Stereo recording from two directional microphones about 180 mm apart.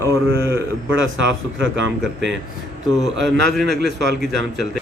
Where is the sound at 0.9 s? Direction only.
90° right.